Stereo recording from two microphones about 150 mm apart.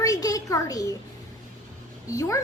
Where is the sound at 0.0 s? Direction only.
25° left (ahead or behind).